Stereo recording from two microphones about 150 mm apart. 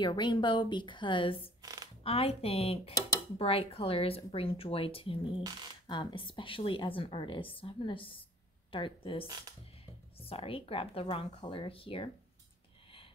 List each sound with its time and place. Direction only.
0.0 s speech: 30° left (ahead or behind)
1.6 s a sound: 25° right (ahead or behind)
2.0 s speech: 40° left (ahead or behind)